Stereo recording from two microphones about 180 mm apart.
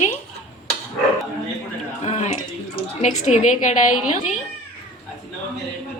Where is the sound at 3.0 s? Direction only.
40° left (ahead or behind).